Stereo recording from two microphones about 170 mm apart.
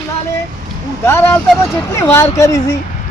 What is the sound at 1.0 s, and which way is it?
A man's voice, 15° left (ahead or behind).